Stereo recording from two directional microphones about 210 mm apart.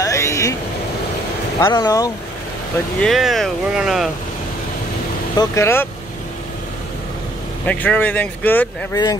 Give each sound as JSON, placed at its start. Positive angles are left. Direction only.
{"t": 0.0, "sound": "vehicle", "side_deg": 15}
{"t": 1.6, "sound": "speech", "side_deg": 20}
{"t": 3.0, "sound": "speech", "side_deg": 0}
{"t": 5.4, "sound": "speech", "side_deg": 15}
{"t": 7.6, "sound": "speech", "side_deg": 5}